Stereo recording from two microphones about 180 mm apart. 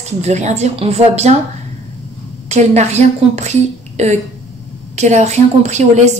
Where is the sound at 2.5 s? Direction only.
40° right (ahead or behind).